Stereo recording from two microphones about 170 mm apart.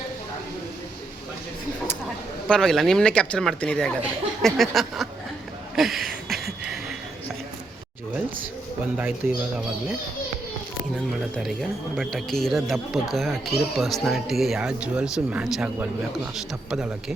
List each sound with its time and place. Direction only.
2.5 s speech: centre (ahead or behind)
5.7 s a sound: centre (ahead or behind)
9.2 s speech: 10° right (ahead or behind)
10.9 s speech: centre (ahead or behind)